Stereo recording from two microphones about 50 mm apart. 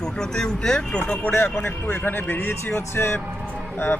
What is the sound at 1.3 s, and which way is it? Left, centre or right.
Speech, left.